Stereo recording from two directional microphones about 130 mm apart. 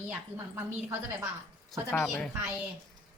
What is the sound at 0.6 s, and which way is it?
Speech, 20° right (ahead or behind).